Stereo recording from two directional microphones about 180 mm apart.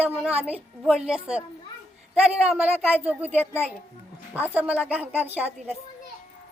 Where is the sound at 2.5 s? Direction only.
5° right (ahead or behind).